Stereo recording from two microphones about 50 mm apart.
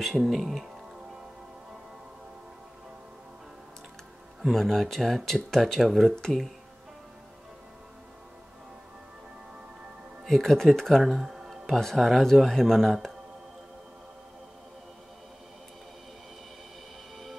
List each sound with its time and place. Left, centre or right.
0.0 s speech: centre
4.5 s speech: centre
10.2 s speech: centre
11.6 s speech: centre